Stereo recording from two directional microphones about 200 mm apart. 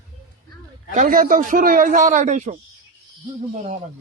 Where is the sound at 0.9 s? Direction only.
45° right (ahead or behind).